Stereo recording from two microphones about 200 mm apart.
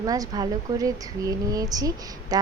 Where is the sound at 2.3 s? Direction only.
20° right (ahead or behind).